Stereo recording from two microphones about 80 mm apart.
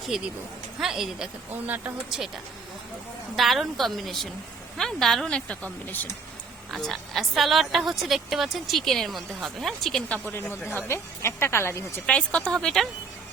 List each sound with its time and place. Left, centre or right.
0.1 s a woman's voice: centre
1.6 s speech: right
2.0 s a woman's voice: centre
5.6 s speech: left
6.7 s a woman's voice: centre
10.7 s a woman's voice: left
12.0 s a woman's voice: centre